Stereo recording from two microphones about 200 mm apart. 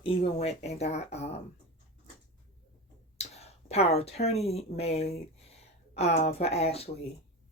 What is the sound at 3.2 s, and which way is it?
Speech, 30° left (ahead or behind).